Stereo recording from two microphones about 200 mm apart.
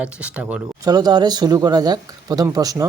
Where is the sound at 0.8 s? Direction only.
20° right (ahead or behind).